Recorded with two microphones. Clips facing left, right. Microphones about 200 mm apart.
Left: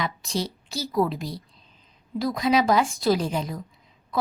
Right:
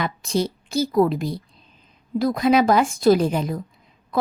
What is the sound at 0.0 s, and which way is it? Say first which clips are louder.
A woman's voice: right 5 dB; 55° right (ahead or behind).